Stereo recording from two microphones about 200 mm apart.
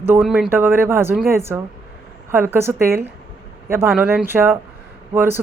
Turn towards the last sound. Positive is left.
turn(degrees=-10)  # may be behind; listen again after turning